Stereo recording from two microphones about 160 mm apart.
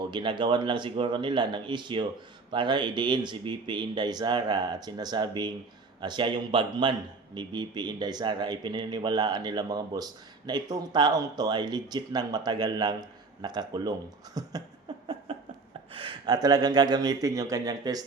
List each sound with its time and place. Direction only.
0.0 s speech: 30° right (ahead or behind)
14.3 s a sound: 25° right (ahead or behind)
15.9 s speech: 35° right (ahead or behind)